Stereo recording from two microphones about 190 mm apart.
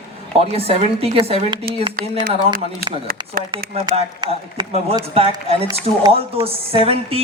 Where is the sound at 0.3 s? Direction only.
30° right (ahead or behind).